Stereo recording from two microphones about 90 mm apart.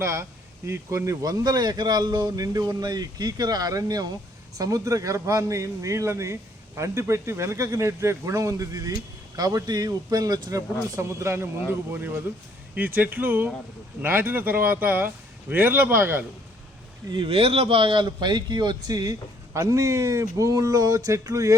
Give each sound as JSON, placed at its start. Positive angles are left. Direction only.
{"t": 0.0, "sound": "a man's voice", "side_deg": -30}
{"t": 17.1, "sound": "a man's voice", "side_deg": -75}